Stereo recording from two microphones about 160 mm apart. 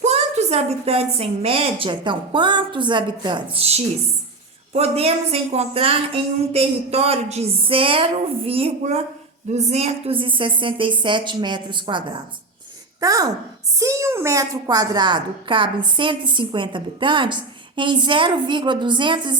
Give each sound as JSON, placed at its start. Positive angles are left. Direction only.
{"t": 0.0, "sound": "a woman's voice", "side_deg": -45}